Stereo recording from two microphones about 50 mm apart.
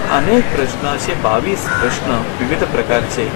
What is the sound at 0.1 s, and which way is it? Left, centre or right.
Speech, centre.